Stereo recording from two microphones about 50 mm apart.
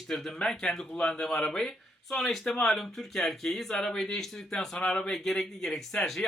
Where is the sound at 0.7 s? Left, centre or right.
Centre.